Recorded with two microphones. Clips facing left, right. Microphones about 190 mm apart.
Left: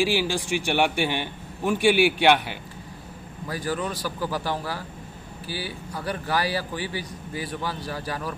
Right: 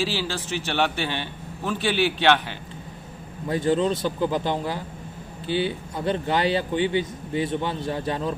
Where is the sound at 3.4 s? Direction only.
25° right (ahead or behind).